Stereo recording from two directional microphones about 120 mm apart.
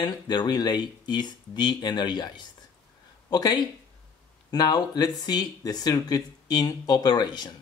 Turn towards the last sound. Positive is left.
turn(degrees=35)  # may be behind; listen again after turning